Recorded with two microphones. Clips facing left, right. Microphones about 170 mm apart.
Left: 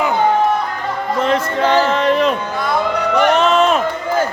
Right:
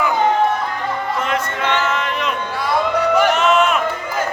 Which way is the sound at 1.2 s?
30° left (ahead or behind).